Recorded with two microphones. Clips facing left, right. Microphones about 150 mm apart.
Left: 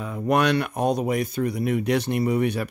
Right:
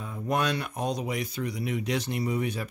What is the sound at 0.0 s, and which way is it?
Speech, 80° left.